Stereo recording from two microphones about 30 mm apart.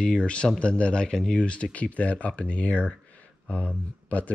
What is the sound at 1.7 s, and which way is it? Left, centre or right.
Speech, left.